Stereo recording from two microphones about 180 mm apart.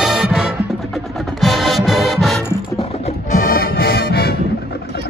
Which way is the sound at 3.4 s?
55° left (ahead or behind).